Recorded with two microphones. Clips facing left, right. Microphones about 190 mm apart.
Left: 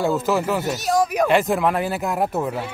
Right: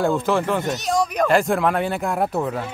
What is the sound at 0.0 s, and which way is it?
Speech, 5° left (ahead or behind).